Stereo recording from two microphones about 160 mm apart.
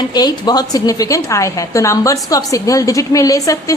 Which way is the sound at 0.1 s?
25° left (ahead or behind).